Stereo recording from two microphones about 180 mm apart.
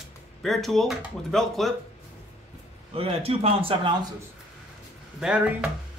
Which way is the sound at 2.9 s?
35° right (ahead or behind).